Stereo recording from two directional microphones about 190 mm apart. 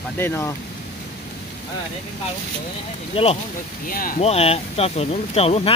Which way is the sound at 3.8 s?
50° left (ahead or behind).